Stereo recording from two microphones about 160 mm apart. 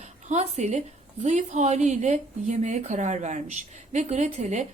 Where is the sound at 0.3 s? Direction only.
45° right (ahead or behind).